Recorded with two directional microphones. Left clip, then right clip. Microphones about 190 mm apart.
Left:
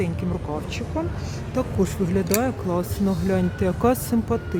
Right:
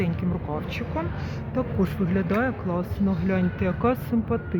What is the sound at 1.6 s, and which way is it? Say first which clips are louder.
Speech: left 3 dB; 30° left (ahead or behind).